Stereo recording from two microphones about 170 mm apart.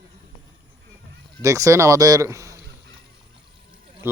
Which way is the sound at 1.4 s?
20° right (ahead or behind).